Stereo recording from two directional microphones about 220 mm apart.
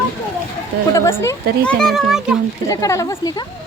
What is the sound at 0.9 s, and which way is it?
A child's voice, 10° left (ahead or behind).